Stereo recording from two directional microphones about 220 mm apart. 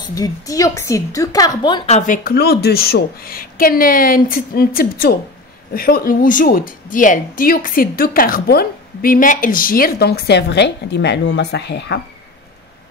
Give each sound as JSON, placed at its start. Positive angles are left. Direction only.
{"t": 0.1, "sound": "a woman's voice", "side_deg": 15}
{"t": 2.0, "sound": "a woman's voice", "side_deg": 40}